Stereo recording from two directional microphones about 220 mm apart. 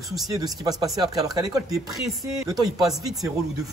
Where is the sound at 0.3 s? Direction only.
15° right (ahead or behind).